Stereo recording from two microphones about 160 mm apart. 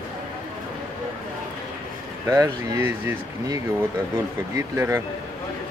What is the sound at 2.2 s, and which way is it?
Speech, 20° right (ahead or behind).